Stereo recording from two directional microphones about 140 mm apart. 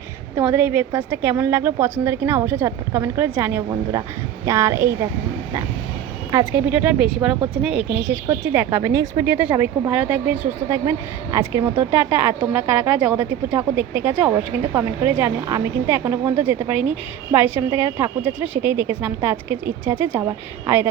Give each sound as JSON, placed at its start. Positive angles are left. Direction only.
{"t": 0.3, "sound": "a woman's voice", "side_deg": -15}
{"t": 6.7, "sound": "a woman's voice", "side_deg": -5}
{"t": 9.2, "sound": "a woman's voice", "side_deg": -15}